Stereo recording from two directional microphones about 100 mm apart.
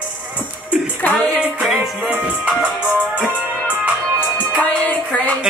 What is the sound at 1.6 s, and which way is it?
Music, centre (ahead or behind).